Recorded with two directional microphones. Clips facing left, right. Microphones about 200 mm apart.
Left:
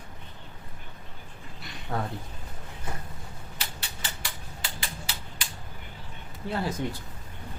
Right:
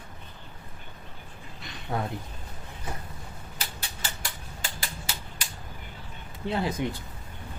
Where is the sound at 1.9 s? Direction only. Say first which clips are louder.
Right 1 dB; 15° right (ahead or behind).